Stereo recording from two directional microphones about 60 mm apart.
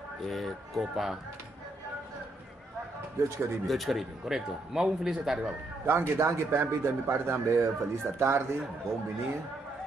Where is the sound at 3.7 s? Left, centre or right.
Centre.